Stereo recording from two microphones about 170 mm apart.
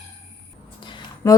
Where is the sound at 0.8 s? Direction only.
30° left (ahead or behind).